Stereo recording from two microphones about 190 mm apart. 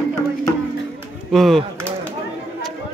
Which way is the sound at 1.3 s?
Centre (ahead or behind).